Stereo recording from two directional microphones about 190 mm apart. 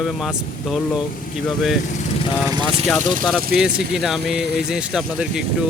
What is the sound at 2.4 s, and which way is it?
Speech, 20° right (ahead or behind).